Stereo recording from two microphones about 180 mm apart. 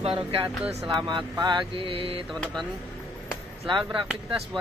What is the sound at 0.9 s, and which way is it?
Speech, 25° right (ahead or behind).